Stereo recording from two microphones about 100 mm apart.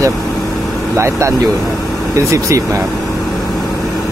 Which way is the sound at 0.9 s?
30° right (ahead or behind).